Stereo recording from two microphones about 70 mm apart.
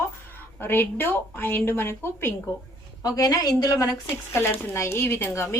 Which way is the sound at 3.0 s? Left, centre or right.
Left.